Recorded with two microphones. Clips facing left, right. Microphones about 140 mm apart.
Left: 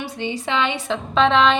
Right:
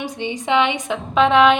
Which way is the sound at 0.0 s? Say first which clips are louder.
Right 1 dB; 15° right (ahead or behind).